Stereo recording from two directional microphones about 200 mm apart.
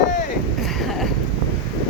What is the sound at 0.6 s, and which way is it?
Vehicle, centre (ahead or behind).